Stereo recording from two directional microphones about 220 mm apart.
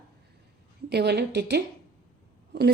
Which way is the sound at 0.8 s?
50° right (ahead or behind).